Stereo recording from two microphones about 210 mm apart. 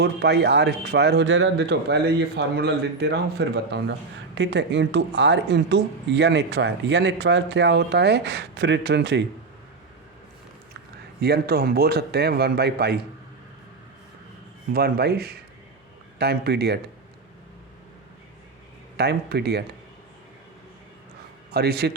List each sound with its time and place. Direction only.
0.0 s speech: 50° right (ahead or behind)
11.2 s speech: 50° right (ahead or behind)
14.7 s speech: 45° right (ahead or behind)
18.9 s speech: 50° right (ahead or behind)
21.5 s speech: 50° right (ahead or behind)